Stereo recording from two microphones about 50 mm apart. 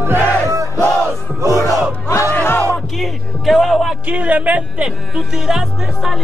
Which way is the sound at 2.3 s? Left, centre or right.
Left.